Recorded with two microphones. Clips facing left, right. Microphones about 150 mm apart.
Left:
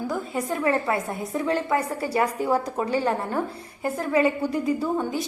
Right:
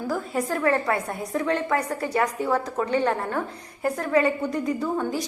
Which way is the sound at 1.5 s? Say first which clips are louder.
Left 1 dB; 30° left (ahead or behind).